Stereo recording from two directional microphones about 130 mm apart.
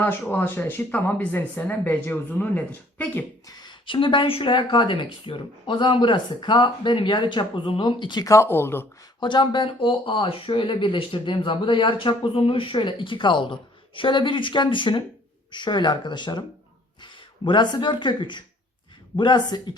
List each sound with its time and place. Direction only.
0.0 s speech: 15° left (ahead or behind)
3.4 s speech: 35° left (ahead or behind); by 8.9 s 15° left (ahead or behind)
9.2 s speech: 35° left (ahead or behind)